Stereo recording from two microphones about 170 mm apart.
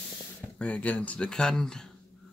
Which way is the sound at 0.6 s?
5° left (ahead or behind).